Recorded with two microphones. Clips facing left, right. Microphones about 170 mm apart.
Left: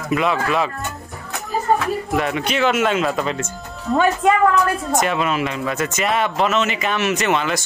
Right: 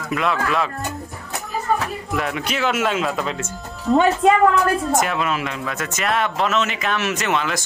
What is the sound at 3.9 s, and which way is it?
Speech, 30° right (ahead or behind).